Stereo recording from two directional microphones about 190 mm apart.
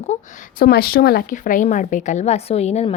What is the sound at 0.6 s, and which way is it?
Speech, 55° left (ahead or behind).